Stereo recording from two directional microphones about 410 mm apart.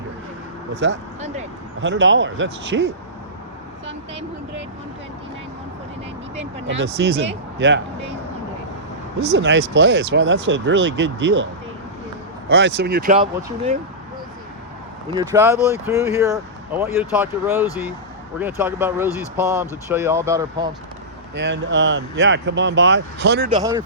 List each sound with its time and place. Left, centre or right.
0.7 s speech: right
6.7 s speech: right
9.2 s speech: right
12.5 s speech: right
15.1 s speech: centre
21.3 s speech: right
23.5 s speech: centre